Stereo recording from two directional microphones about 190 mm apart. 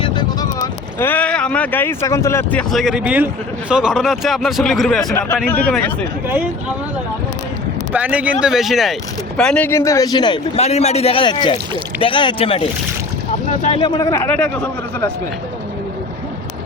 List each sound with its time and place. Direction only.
0.0 s speech: 20° left (ahead or behind)
6.2 s speech: 10° right (ahead or behind)
7.9 s a man's voice: 5° right (ahead or behind); by 15.1 s 10° left (ahead or behind)